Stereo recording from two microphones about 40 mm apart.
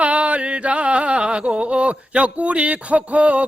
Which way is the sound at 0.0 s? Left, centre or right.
Right.